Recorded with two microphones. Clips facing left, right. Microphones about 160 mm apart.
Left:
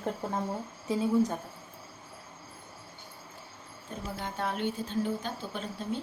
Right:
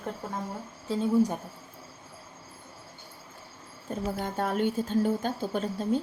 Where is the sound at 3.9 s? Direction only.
45° right (ahead or behind).